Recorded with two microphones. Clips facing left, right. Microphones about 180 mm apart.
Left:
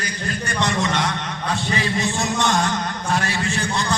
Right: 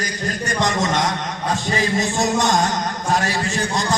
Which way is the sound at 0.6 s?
45° right (ahead or behind).